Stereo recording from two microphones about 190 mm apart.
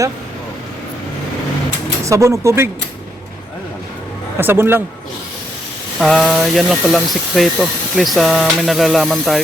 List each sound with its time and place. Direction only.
2.0 s speech: 15° right (ahead or behind)
4.4 s speech: 10° right (ahead or behind)
6.0 s speech: centre (ahead or behind)